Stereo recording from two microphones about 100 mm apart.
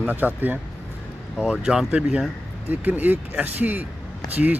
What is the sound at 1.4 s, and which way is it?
Speech, 5° right (ahead or behind).